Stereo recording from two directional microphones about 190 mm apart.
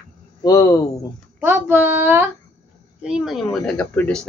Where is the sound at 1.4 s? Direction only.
10° right (ahead or behind).